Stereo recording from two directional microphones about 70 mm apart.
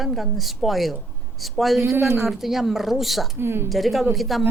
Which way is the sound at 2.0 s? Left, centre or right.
Right.